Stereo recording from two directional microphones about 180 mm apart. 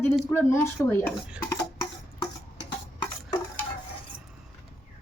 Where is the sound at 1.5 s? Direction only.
20° left (ahead or behind).